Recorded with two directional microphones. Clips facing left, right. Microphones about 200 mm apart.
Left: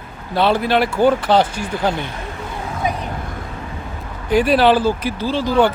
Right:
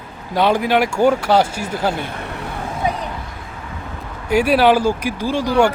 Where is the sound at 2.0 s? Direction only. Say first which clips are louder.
Right 1 dB; 65° right (ahead or behind).